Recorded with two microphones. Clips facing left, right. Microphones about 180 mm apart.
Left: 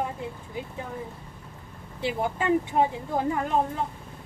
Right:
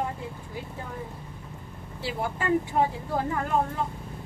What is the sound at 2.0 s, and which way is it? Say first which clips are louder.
Speech: left 3 dB; 20° left (ahead or behind).